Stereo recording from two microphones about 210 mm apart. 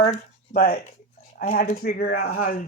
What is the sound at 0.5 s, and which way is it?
Speech, 45° left (ahead or behind).